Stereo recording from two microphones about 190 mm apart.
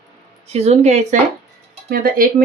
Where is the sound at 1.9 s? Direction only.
50° right (ahead or behind).